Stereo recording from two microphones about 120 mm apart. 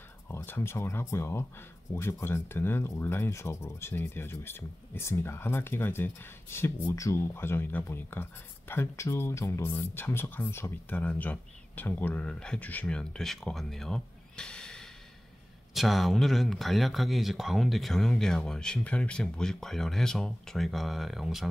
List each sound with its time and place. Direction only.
0.3 s speech: 20° left (ahead or behind); by 21.5 s centre (ahead or behind)